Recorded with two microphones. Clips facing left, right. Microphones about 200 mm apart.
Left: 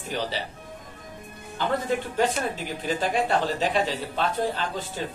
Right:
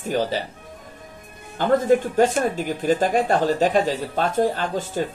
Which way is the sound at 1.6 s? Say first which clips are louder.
Right 8 dB; 45° right (ahead or behind).